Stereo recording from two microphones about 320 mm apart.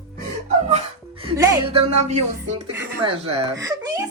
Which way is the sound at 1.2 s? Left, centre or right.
Centre.